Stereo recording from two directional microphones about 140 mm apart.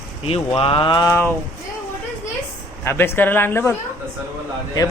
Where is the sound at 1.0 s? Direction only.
15° left (ahead or behind).